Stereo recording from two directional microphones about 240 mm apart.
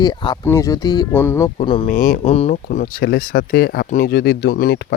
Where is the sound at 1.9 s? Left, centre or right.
Left.